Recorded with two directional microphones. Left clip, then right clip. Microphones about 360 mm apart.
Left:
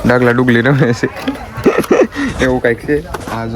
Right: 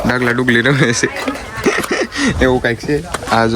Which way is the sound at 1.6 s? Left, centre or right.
Centre.